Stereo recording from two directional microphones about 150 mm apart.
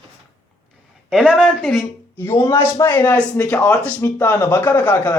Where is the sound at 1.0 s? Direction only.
Centre (ahead or behind).